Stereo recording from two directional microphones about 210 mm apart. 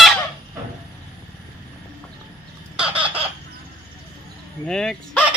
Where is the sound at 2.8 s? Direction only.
5° right (ahead or behind).